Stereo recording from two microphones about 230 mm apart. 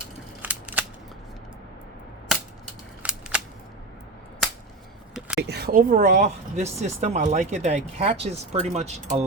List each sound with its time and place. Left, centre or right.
0.4 s scissors: centre
3.0 s a sound: centre
5.4 s speech: right